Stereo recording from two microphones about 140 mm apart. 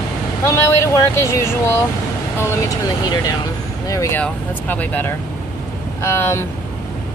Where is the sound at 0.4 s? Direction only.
20° left (ahead or behind).